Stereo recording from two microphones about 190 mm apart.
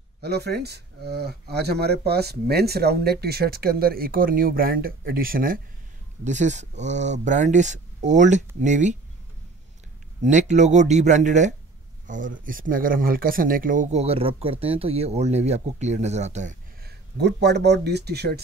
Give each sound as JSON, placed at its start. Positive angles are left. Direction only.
{"t": 0.2, "sound": "speech", "side_deg": -60}
{"t": 6.2, "sound": "speech", "side_deg": -40}
{"t": 10.2, "sound": "speech", "side_deg": -40}
{"t": 16.8, "sound": "speech", "side_deg": -65}